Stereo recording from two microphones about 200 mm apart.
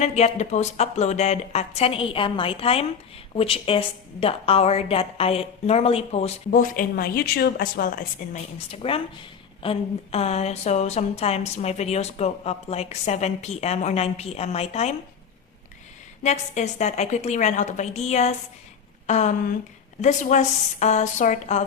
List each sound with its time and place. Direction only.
0.0 s a woman's voice: 35° left (ahead or behind)
8.5 s a woman's voice: 30° left (ahead or behind)
16.2 s a woman's voice: 35° left (ahead or behind)